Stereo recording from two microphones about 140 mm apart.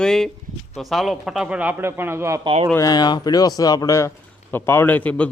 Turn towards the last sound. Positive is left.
turn(degrees=10)  # may be behind; listen again after turning